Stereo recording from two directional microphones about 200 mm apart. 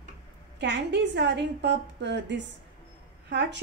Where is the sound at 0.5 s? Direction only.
60° right (ahead or behind).